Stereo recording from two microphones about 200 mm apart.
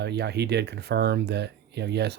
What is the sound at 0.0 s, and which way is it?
Speech, 55° right (ahead or behind).